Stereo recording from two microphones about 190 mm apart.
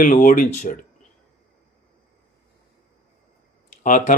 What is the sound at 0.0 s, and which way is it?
Speech, 45° left (ahead or behind).